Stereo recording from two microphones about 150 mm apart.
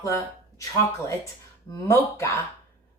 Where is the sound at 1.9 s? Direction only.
15° left (ahead or behind).